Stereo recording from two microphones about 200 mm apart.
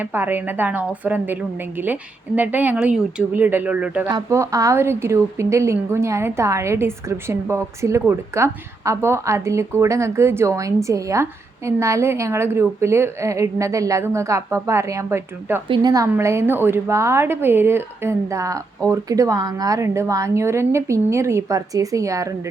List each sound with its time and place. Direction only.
0.0 s a woman's voice: 10° right (ahead or behind)